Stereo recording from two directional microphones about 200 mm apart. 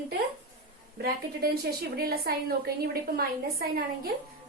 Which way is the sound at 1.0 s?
50° right (ahead or behind).